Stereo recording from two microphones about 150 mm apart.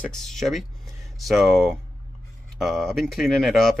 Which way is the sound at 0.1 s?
5° left (ahead or behind).